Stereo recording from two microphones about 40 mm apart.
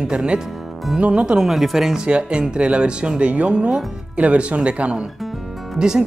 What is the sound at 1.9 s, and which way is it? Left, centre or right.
Speech, right.